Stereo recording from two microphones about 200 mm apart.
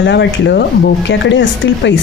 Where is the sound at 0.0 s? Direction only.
60° left (ahead or behind).